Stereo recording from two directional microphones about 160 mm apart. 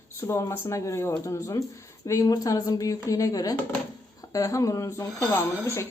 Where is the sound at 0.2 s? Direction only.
15° left (ahead or behind).